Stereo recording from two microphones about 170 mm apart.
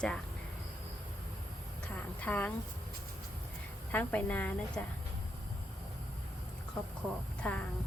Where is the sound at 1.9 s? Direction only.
10° left (ahead or behind).